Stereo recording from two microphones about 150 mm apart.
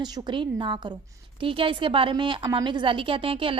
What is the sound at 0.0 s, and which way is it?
A woman's voice, 30° right (ahead or behind).